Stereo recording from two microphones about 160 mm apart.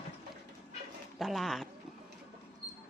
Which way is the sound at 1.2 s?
Centre (ahead or behind).